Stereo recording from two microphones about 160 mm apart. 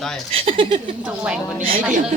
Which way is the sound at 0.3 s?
35° right (ahead or behind).